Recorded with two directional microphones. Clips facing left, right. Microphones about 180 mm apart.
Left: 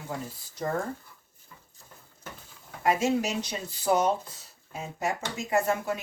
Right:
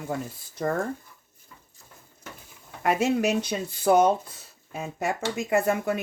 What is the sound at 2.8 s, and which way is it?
Speech, 55° right (ahead or behind).